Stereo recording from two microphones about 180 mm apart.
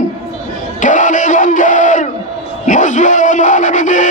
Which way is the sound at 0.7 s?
45° left (ahead or behind).